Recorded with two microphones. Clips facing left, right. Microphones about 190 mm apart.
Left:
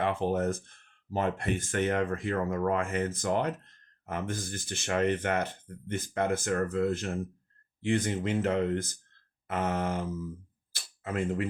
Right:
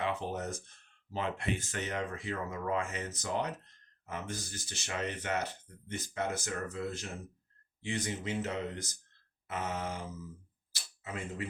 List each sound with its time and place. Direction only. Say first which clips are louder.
0.0 s speech: left 7 dB; 55° left (ahead or behind)